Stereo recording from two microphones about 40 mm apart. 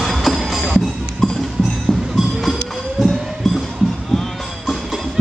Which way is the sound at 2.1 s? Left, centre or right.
Centre.